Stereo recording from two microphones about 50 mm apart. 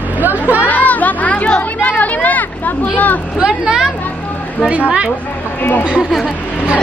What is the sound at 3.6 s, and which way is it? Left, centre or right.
Speech, centre.